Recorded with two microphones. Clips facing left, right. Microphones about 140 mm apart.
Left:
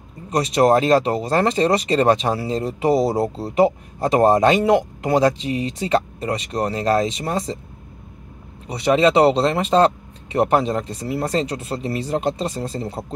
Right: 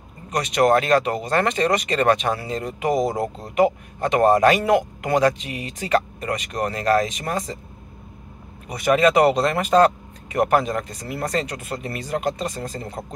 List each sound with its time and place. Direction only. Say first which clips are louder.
0.3 s speech: left 2 dB; 30° left (ahead or behind)
8.6 s speech: left 1 dB; 25° left (ahead or behind)